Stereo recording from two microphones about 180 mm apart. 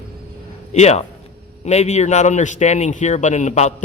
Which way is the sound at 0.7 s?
35° left (ahead or behind).